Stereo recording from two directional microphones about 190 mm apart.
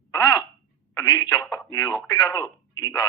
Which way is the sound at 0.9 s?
20° left (ahead or behind).